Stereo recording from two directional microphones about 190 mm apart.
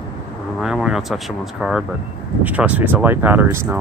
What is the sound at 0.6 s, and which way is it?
Speech, centre (ahead or behind).